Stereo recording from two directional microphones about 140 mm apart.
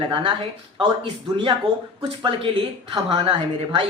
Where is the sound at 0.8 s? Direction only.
35° right (ahead or behind).